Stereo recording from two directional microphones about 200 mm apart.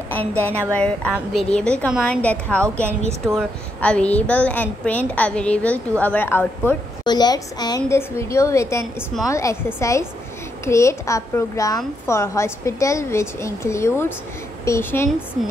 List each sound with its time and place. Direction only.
0.7 s a woman's voice: 5° left (ahead or behind)